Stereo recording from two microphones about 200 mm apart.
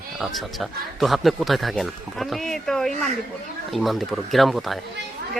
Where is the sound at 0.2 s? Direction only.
Centre (ahead or behind).